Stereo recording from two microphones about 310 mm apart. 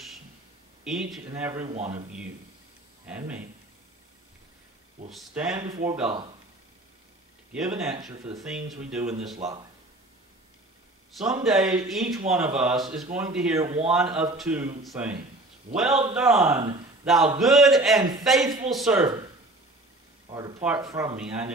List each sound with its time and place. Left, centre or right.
0.8 s speech: centre
1.7 s speech: right
3.1 s speech: centre
5.1 s speech: centre
7.5 s speech: centre
8.4 s speech: centre
9.4 s speech: centre
11.1 s a man's voice: centre
18.4 s speech: centre
18.7 s speech: centre
20.2 s speech: centre